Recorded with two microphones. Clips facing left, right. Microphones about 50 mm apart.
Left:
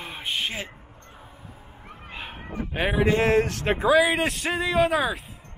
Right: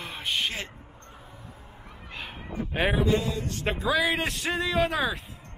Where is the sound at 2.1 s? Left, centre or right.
Centre.